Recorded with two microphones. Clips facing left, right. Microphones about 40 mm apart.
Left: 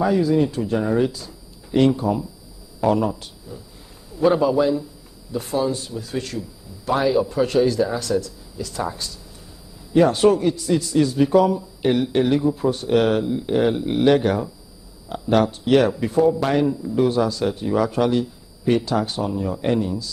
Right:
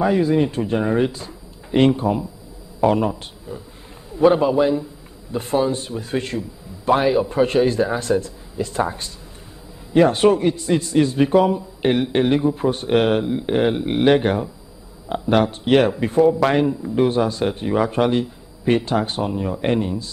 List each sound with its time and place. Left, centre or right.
0.0 s a man's voice: right
16.2 s a man's voice: centre
16.4 s a man's voice: right